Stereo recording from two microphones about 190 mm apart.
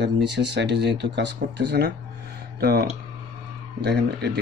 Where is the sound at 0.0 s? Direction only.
65° right (ahead or behind).